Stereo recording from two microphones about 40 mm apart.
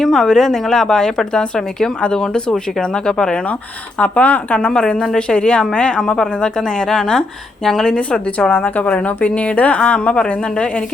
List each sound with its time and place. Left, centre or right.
0.0 s a woman's voice: centre
2.0 s a woman's voice: left
3.9 s speech: left
4.7 s a woman's voice: left
7.9 s a woman's voice: left
8.4 s speech: left